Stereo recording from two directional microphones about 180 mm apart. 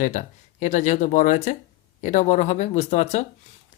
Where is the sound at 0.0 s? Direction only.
45° left (ahead or behind).